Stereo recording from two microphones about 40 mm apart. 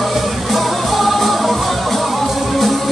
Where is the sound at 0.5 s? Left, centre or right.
Centre.